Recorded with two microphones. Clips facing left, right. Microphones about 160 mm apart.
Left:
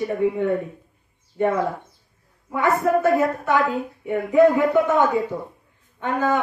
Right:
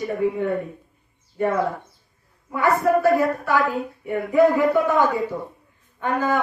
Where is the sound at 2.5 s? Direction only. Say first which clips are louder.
Right 1 dB; 20° left (ahead or behind).